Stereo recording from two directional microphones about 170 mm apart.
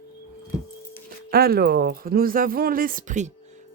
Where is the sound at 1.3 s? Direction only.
65° right (ahead or behind); by 3.3 s 45° right (ahead or behind).